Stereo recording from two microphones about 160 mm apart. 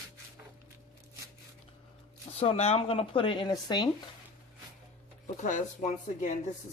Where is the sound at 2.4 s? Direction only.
35° left (ahead or behind).